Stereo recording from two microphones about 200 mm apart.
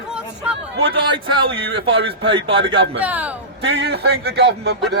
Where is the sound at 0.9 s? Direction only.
25° right (ahead or behind).